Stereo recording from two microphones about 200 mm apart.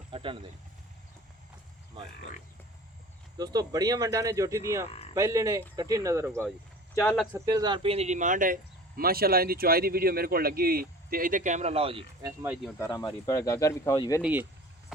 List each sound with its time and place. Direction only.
0.1 s a sound: 25° right (ahead or behind)
3.3 s speech: 20° right (ahead or behind)
4.9 s speech: 30° left (ahead or behind)
5.1 s speech: 15° right (ahead or behind)
6.9 s speech: 15° left (ahead or behind)
7.3 s speech: 20° right (ahead or behind)
12.4 s speech: 10° right (ahead or behind)
12.8 s speech: 20° left (ahead or behind)
14.2 s speech: 10° right (ahead or behind)